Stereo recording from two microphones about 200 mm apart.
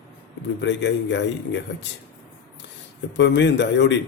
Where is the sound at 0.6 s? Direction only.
60° left (ahead or behind).